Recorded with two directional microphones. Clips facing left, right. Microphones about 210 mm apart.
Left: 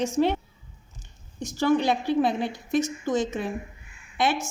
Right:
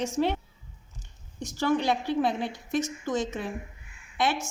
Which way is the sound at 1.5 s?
15° left (ahead or behind).